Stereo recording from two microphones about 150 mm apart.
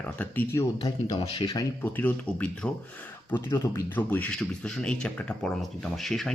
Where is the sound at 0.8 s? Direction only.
35° left (ahead or behind).